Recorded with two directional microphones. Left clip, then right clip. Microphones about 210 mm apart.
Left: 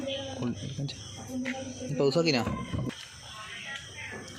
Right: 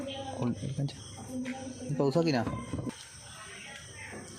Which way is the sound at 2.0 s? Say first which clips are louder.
Left 3 dB; 40° right (ahead or behind).